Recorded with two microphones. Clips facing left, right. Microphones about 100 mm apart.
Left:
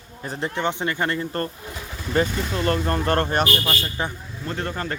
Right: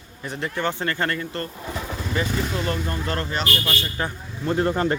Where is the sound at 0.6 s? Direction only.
20° left (ahead or behind).